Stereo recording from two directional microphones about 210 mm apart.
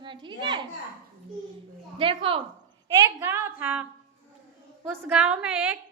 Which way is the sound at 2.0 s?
25° right (ahead or behind).